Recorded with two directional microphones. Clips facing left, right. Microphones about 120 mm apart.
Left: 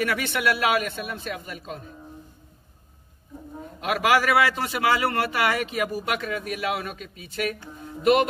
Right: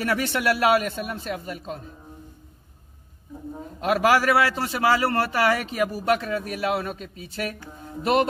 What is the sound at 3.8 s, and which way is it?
Speech, 35° right (ahead or behind).